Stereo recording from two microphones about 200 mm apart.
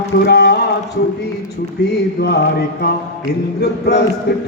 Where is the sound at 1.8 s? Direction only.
55° left (ahead or behind).